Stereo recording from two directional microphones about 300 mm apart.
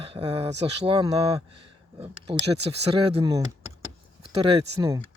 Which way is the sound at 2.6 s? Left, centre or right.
Centre.